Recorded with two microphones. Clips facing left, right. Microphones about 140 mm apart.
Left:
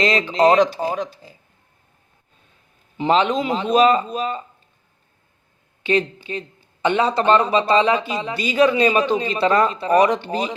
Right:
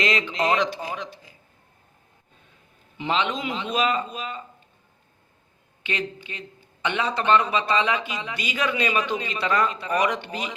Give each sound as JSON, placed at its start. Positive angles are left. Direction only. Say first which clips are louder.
{"t": 0.0, "sound": "speech", "louder": "left 8 dB", "side_deg": 35}
{"t": 3.0, "sound": "speech", "louder": "left 8 dB", "side_deg": 40}
{"t": 5.8, "sound": "speech", "louder": "left 10 dB", "side_deg": 35}